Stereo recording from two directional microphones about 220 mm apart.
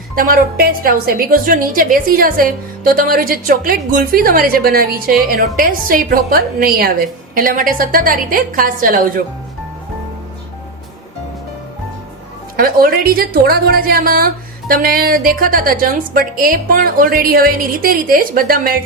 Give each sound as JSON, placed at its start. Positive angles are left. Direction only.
{"t": 0.2, "sound": "a woman's voice", "side_deg": -40}
{"t": 12.5, "sound": "a woman's voice", "side_deg": -40}